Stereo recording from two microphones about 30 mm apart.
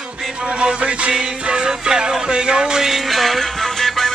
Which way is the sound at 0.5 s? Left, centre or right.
Right.